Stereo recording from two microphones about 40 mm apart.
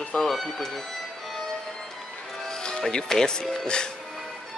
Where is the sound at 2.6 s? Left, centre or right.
Left.